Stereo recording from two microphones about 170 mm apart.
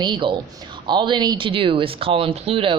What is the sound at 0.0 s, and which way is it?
Speech, 30° right (ahead or behind).